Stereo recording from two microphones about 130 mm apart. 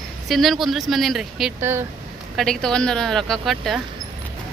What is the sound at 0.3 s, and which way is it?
A woman's voice, centre (ahead or behind).